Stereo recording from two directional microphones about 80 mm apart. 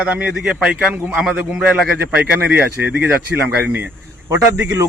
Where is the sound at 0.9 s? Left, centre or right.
Right.